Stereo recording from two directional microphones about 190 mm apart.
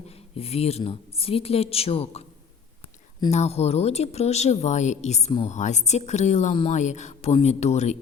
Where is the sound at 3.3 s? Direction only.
35° left (ahead or behind).